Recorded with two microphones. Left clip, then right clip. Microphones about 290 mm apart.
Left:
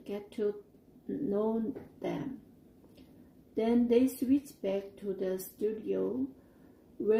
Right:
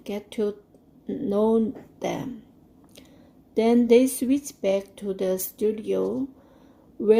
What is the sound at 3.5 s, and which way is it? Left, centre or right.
Speech, right.